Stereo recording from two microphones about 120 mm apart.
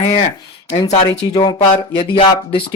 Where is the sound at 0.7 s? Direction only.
70° left (ahead or behind).